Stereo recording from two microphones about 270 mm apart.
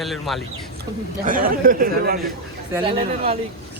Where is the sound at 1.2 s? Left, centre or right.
Right.